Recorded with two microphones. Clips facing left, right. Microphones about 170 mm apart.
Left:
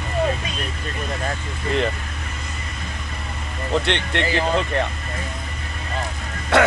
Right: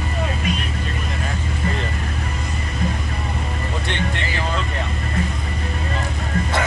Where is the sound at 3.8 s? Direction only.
65° left (ahead or behind).